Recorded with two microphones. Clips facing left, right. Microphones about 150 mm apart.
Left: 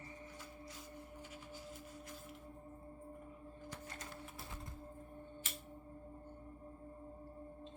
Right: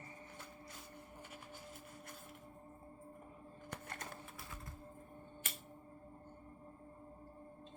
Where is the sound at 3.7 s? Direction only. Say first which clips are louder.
Right 3 dB; 60° right (ahead or behind).